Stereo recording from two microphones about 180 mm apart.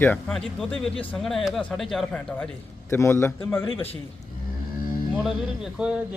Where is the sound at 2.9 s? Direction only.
15° left (ahead or behind).